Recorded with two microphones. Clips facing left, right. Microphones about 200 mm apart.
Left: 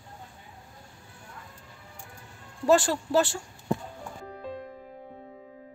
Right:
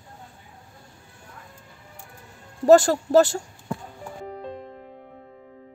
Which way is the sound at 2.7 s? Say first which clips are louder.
Right 7 dB; 40° right (ahead or behind).